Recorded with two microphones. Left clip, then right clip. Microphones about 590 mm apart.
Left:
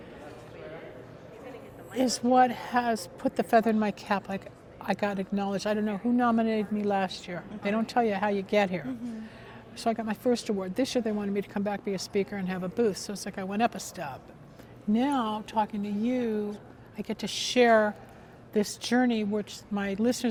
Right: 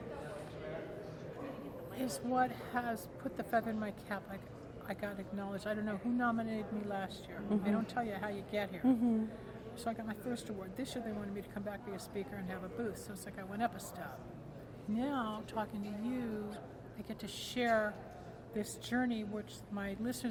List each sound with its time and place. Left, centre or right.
2.0 s speech: left